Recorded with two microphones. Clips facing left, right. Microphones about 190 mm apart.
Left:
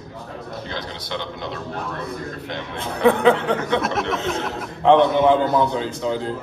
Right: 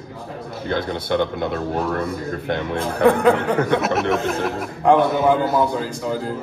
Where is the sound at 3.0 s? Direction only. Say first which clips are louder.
Even; centre (ahead or behind).